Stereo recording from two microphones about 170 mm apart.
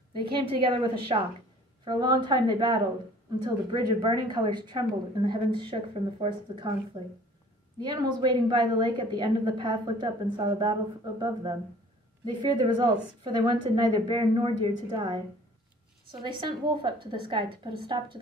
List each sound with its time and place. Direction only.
0.2 s a woman's voice: 30° right (ahead or behind)